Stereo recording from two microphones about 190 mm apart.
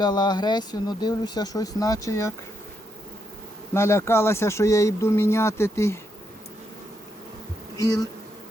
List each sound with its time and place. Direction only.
0.0 s speech: 20° left (ahead or behind)
3.8 s speech: 15° left (ahead or behind)